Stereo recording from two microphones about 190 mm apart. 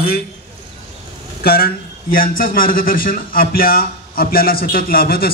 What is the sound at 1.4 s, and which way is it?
A man's voice, 50° left (ahead or behind).